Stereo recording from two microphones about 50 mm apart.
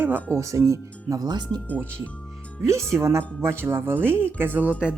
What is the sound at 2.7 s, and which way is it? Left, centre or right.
Speech, right.